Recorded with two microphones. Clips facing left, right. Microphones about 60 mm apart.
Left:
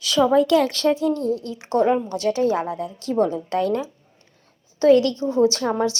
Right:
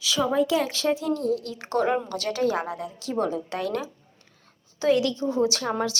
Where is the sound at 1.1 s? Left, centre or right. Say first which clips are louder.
Left 2 dB; left.